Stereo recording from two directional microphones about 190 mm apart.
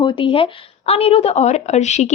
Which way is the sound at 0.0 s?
25° left (ahead or behind).